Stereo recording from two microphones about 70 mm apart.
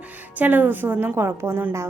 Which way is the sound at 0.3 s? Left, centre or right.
Right.